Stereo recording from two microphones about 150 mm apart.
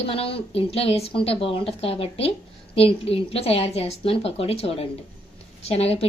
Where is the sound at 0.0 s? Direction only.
40° left (ahead or behind).